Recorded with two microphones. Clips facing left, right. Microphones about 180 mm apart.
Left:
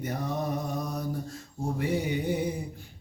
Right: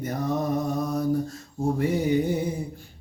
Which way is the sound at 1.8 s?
40° right (ahead or behind).